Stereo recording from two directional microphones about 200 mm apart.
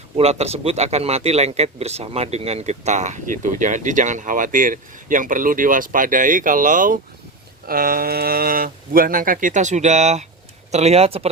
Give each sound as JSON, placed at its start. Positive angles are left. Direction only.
{"t": 0.2, "sound": "speech", "side_deg": -30}